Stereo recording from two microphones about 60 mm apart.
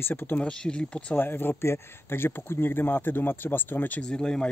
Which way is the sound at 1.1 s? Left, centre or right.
Left.